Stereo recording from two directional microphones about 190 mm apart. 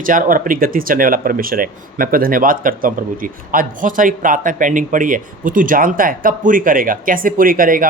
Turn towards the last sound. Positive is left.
turn(degrees=-50)  # may be behind; listen again after turning